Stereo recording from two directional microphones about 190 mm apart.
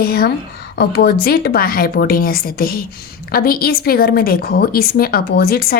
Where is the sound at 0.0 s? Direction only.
55° left (ahead or behind).